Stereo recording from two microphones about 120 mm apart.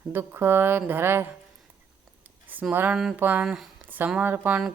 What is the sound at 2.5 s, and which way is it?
Speech, 15° right (ahead or behind).